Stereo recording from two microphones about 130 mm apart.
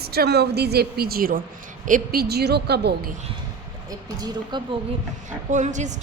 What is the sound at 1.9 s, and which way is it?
Speech, 85° right.